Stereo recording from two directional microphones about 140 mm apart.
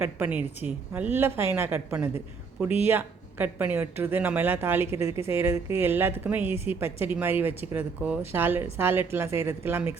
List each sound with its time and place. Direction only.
0.0 s speech: 15° right (ahead or behind)